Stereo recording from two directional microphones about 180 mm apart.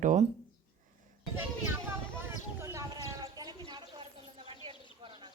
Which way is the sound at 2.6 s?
15° right (ahead or behind).